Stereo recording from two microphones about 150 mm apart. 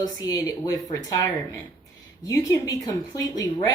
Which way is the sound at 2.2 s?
20° left (ahead or behind).